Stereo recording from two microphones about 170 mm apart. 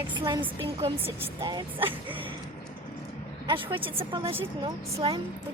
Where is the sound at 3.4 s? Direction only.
30° right (ahead or behind).